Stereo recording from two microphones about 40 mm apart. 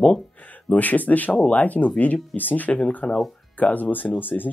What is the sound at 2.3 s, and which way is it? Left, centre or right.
Speech, left.